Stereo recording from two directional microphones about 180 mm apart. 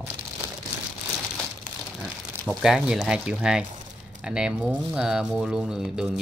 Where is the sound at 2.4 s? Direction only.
5° right (ahead or behind).